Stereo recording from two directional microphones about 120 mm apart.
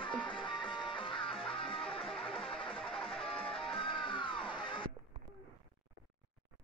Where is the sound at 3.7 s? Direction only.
45° left (ahead or behind).